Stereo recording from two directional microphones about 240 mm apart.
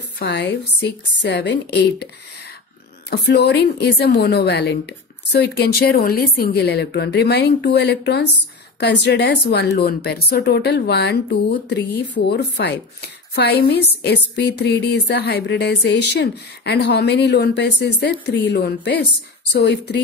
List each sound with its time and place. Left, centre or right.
0.2 s a woman's voice: left
3.1 s a woman's voice: left